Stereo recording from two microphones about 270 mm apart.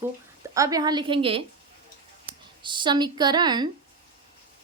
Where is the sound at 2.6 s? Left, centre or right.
Centre.